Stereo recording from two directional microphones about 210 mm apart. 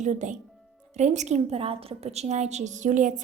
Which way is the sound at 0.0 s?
35° right (ahead or behind).